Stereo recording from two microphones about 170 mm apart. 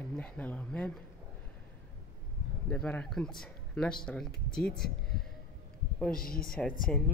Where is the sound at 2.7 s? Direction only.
5° left (ahead or behind).